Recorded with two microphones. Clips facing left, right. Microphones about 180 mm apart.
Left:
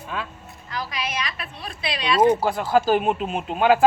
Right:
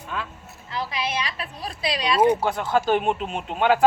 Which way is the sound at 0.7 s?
25° right (ahead or behind).